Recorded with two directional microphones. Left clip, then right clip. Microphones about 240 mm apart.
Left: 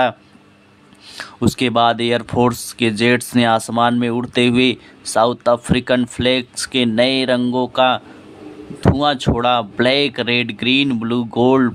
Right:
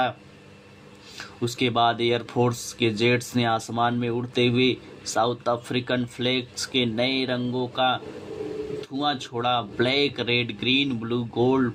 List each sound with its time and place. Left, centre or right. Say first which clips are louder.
1.1 s speech: left 9 dB; left